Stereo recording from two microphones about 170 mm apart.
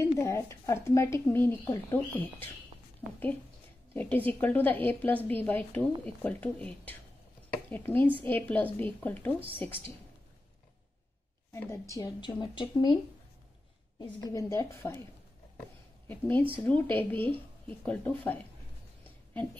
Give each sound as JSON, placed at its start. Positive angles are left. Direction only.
{"t": 0.0, "sound": "a woman's voice", "side_deg": 15}
{"t": 3.9, "sound": "a woman's voice", "side_deg": 10}
{"t": 9.7, "sound": "a woman's voice", "side_deg": -30}
{"t": 11.5, "sound": "a woman's voice", "side_deg": 15}
{"t": 16.1, "sound": "a woman's voice", "side_deg": 10}